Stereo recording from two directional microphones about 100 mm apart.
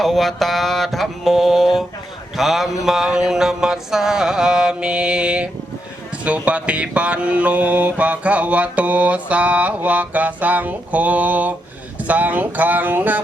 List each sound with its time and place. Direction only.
0.0 s mantra: centre (ahead or behind); by 13.1 s 15° right (ahead or behind)